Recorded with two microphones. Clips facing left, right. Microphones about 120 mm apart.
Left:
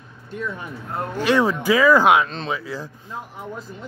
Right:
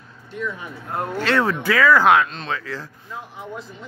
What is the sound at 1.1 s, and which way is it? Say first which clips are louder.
Speech: left 2 dB; 15° left (ahead or behind).